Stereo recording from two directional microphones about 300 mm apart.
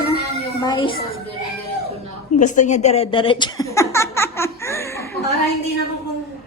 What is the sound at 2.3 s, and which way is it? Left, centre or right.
Speech, left.